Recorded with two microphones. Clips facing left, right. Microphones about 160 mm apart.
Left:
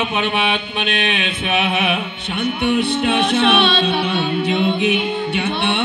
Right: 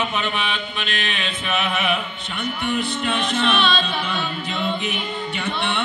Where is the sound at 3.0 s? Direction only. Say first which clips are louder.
Left 6 dB; 70° left (ahead or behind).